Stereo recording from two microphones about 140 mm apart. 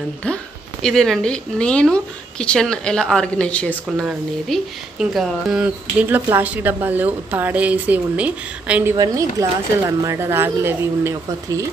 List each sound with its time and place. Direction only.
0.8 s speech: 5° left (ahead or behind)
4.0 s speech: 5° right (ahead or behind)
8.9 s speech: 25° right (ahead or behind)